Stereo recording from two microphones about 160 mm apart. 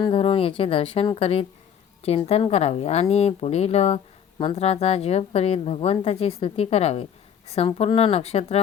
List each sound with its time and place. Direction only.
0.0 s a woman's voice: 35° left (ahead or behind)